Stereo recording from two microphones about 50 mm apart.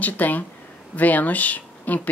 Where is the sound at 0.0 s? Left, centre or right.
Left.